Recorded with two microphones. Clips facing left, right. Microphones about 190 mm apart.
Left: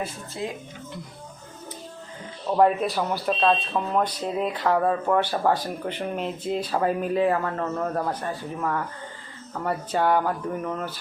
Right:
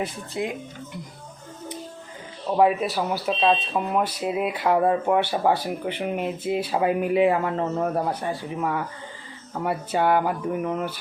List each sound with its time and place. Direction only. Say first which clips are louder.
0.0 s speech: right 3 dB; 15° right (ahead or behind)
2.6 s speech: even; 5° right (ahead or behind)